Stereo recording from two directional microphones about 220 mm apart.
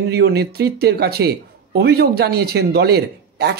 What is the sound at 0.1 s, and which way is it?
Speech, 45° right (ahead or behind).